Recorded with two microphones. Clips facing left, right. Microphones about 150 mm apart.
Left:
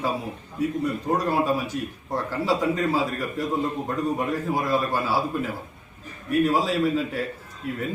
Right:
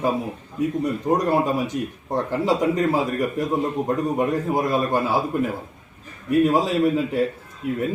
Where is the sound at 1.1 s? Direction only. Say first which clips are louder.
Right 3 dB; 20° right (ahead or behind).